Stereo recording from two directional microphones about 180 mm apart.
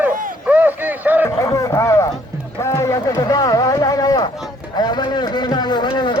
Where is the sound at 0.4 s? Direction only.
10° right (ahead or behind).